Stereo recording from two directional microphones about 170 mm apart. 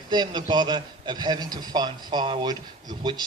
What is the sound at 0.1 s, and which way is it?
A man's voice, 25° right (ahead or behind).